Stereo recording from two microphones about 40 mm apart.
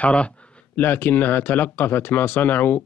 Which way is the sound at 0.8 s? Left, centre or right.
Left.